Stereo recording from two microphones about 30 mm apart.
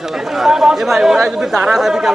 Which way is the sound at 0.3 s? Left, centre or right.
Centre.